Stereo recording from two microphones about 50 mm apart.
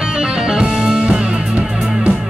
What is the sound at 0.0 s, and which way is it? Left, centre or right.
Music, centre.